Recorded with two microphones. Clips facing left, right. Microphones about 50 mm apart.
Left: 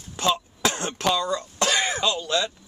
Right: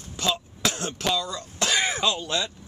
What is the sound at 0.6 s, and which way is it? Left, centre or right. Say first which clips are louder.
Cough: left 3 dB; left.